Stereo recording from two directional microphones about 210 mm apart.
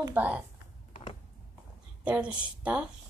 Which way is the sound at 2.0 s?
5° right (ahead or behind).